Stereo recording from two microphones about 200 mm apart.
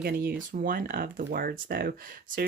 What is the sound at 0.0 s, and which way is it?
Speech, 50° right (ahead or behind).